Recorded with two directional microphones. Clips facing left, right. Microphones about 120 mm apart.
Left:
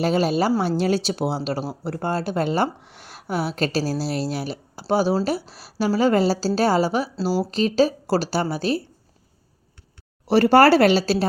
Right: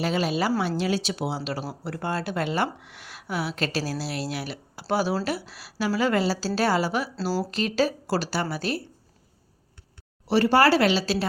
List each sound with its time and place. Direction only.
0.0 s speech: 40° left (ahead or behind)
10.2 s speech: 45° left (ahead or behind)